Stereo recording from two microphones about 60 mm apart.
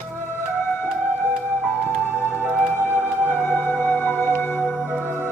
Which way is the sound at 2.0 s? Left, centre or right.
Left.